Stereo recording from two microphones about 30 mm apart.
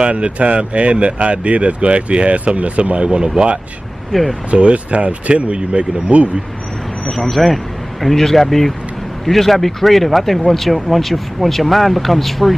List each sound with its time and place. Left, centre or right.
0.0 s speech: right
4.1 s speech: centre
4.5 s speech: right
7.1 s speech: centre